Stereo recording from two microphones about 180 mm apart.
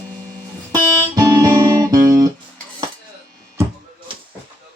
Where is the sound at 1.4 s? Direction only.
20° right (ahead or behind).